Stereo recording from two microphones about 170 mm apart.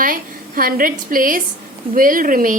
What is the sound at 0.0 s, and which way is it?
A woman's voice, 55° right (ahead or behind).